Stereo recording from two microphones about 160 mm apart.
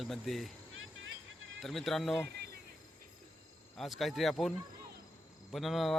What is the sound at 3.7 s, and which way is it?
Speech, centre (ahead or behind).